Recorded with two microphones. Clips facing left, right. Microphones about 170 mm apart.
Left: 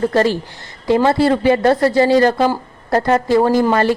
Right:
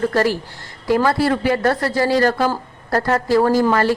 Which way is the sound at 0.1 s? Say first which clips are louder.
Left 3 dB; 25° left (ahead or behind).